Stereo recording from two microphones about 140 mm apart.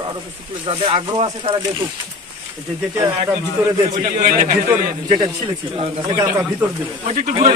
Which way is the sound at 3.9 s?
65° right (ahead or behind).